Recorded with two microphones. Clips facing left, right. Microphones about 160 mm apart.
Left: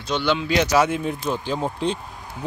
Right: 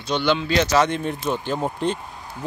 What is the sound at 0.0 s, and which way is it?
Speech, 5° left (ahead or behind).